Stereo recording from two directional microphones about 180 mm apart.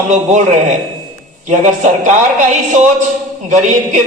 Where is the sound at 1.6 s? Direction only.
40° right (ahead or behind).